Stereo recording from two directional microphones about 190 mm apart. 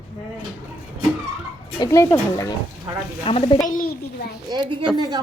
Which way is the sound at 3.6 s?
45° left (ahead or behind).